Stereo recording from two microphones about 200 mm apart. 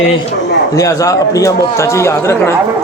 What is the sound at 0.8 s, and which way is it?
Speech, 15° left (ahead or behind).